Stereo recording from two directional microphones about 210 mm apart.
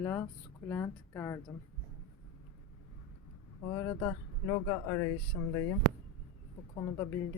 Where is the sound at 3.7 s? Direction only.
10° left (ahead or behind).